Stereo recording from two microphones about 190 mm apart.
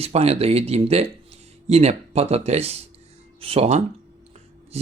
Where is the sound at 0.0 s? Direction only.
35° right (ahead or behind).